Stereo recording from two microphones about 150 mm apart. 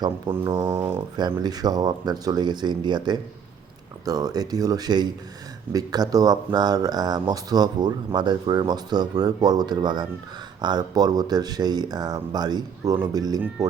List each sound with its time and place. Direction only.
0.0 s speech: 30° right (ahead or behind)